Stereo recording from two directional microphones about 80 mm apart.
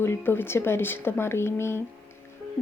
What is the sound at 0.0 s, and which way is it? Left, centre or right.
Speech, left.